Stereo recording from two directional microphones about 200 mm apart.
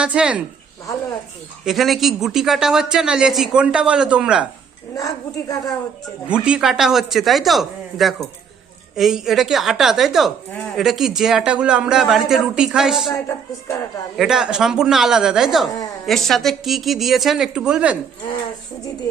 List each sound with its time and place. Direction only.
0.0 s a woman's voice: 5° right (ahead or behind)
1.6 s a woman's voice: centre (ahead or behind)
4.9 s a woman's voice: 15° left (ahead or behind)
6.2 s a woman's voice: 5° right (ahead or behind)
14.2 s a woman's voice: 5° right (ahead or behind)